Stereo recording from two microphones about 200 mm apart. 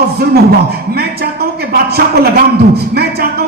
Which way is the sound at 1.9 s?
50° right (ahead or behind).